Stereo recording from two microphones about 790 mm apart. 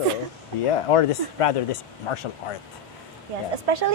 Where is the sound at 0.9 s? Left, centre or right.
Left.